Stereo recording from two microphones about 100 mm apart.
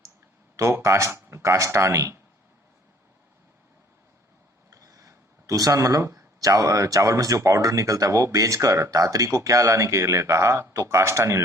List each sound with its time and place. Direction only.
0.5 s speech: 30° right (ahead or behind)
4.7 s speech: 30° right (ahead or behind)